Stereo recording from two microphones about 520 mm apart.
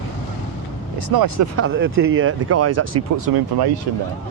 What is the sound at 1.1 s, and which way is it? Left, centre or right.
Speech, right.